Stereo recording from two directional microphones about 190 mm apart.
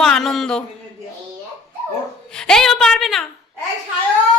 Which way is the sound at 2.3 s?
5° left (ahead or behind).